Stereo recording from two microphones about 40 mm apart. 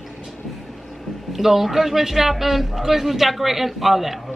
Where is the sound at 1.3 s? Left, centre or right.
Centre.